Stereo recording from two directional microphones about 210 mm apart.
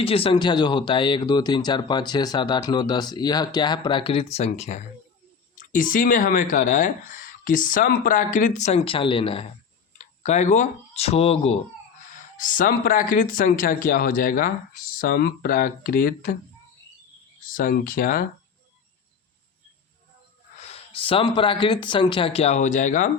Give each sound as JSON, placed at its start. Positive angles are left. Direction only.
{"t": 0.0, "sound": "speech", "side_deg": 25}
{"t": 12.4, "sound": "speech", "side_deg": 40}
{"t": 17.5, "sound": "speech", "side_deg": 40}
{"t": 20.6, "sound": "speech", "side_deg": 30}